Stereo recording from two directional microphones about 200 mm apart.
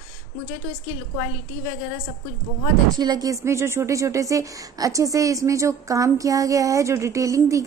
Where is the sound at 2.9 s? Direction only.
20° right (ahead or behind).